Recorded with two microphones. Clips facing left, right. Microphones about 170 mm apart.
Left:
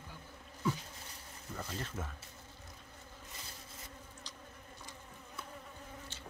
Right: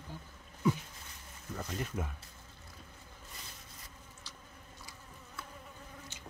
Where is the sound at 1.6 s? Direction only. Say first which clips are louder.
Right 5 dB; 10° right (ahead or behind).